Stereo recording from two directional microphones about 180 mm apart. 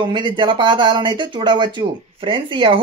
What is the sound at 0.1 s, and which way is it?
Speech, 25° right (ahead or behind).